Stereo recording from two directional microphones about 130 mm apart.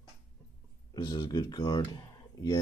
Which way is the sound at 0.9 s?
30° left (ahead or behind).